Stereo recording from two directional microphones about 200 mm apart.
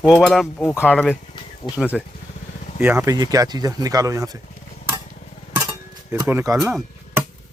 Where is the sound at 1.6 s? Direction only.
20° left (ahead or behind).